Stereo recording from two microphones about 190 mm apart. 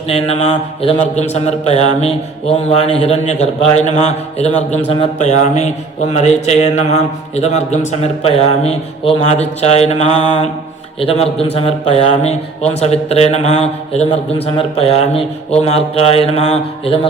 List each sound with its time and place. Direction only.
0.1 s a man's voice: 30° left (ahead or behind)